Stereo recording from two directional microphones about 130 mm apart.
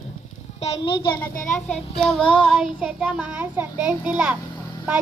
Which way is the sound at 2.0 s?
5° left (ahead or behind).